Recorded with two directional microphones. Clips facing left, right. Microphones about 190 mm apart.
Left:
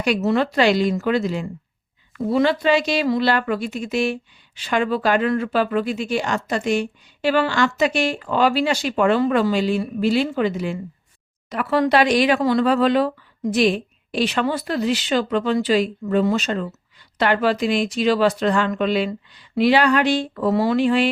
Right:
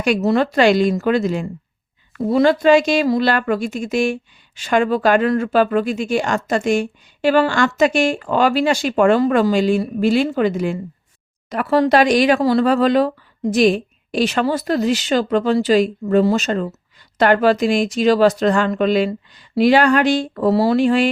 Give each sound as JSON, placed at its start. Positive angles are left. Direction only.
{"t": 0.0, "sound": "a woman's voice", "side_deg": -40}